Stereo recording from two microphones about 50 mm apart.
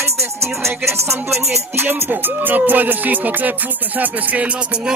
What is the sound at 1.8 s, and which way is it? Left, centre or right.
Music, right.